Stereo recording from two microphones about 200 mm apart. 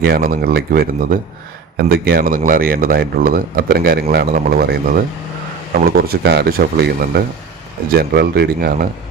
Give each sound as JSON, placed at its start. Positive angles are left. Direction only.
{"t": 0.0, "sound": "a man's voice", "side_deg": -50}
{"t": 1.9, "sound": "a man's voice", "side_deg": -50}